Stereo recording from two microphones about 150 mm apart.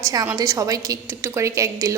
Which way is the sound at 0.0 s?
25° right (ahead or behind).